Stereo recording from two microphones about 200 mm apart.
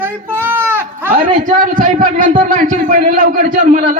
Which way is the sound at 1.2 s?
40° right (ahead or behind).